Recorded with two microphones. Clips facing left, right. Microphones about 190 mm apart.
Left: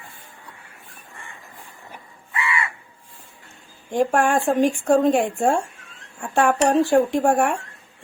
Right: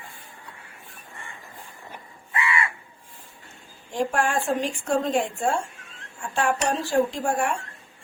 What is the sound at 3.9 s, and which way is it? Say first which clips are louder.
Speech: left 5 dB; 50° left (ahead or behind).